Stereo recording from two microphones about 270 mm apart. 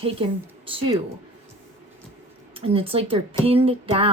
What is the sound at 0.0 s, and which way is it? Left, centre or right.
Speech, centre.